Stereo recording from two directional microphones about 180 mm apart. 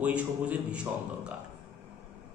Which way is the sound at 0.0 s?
5° right (ahead or behind).